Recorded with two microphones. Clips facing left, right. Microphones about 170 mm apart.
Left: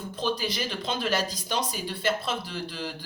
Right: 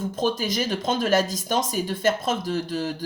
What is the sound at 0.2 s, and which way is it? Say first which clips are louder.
Speech: right 4 dB; 45° right (ahead or behind).